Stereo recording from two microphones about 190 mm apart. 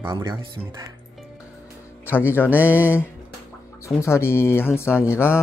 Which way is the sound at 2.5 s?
10° right (ahead or behind).